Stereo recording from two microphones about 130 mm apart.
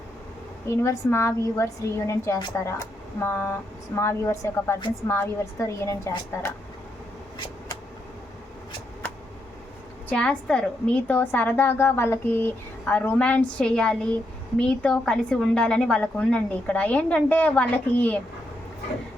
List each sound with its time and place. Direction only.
0.7 s speech: 20° left (ahead or behind)
10.1 s a woman's voice: 5° left (ahead or behind)